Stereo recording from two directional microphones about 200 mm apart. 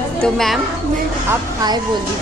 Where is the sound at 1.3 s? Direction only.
20° right (ahead or behind).